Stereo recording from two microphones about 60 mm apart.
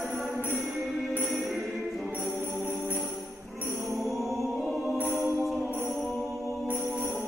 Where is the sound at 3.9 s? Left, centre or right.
Centre.